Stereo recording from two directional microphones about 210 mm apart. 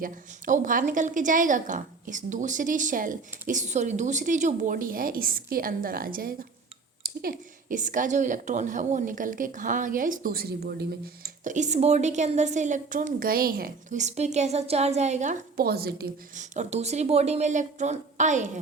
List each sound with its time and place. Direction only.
0.0 s a woman's voice: 40° right (ahead or behind)